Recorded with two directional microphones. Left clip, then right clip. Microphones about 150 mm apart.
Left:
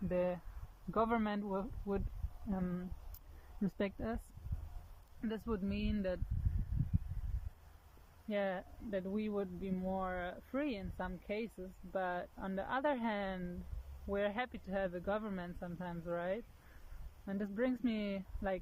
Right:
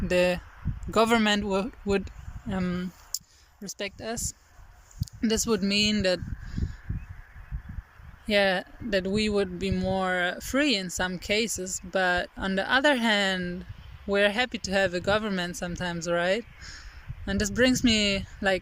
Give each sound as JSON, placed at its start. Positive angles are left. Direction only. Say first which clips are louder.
{"t": 0.1, "sound": "speech", "louder": "right 13 dB", "side_deg": -10}
{"t": 5.2, "sound": "speech", "louder": "right 15 dB", "side_deg": -20}
{"t": 8.3, "sound": "speech", "louder": "right 15 dB", "side_deg": -15}